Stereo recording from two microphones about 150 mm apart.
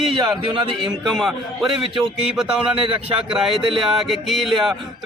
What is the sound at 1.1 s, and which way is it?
Speech, centre (ahead or behind).